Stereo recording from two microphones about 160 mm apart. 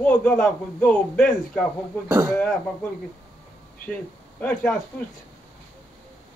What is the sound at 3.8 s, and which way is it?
Speech, 10° left (ahead or behind).